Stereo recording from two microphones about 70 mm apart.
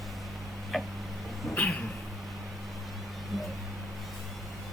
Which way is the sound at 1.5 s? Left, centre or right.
Centre.